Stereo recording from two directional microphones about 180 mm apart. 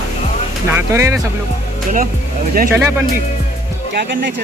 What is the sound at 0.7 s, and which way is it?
Speech, 15° right (ahead or behind).